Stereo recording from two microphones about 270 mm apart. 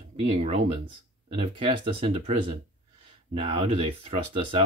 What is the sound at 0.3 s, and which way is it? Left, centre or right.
Speech, right.